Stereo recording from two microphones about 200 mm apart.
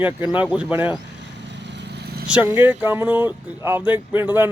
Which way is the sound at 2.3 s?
10° right (ahead or behind).